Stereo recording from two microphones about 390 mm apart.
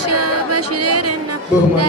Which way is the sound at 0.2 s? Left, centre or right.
Right.